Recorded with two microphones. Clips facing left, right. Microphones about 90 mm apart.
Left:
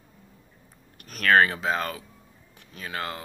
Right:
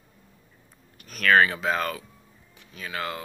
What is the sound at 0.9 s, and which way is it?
Speech, 40° left (ahead or behind).